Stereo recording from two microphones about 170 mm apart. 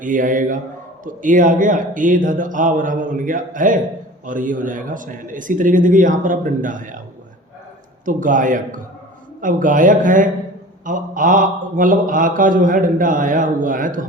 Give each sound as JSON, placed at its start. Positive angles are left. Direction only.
{"t": 0.0, "sound": "a man's voice", "side_deg": -50}
{"t": 8.0, "sound": "a man's voice", "side_deg": -50}